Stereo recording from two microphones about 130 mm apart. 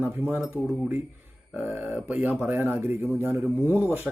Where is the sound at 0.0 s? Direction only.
15° right (ahead or behind).